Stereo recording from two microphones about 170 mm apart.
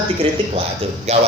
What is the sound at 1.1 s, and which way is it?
Speech, 40° right (ahead or behind).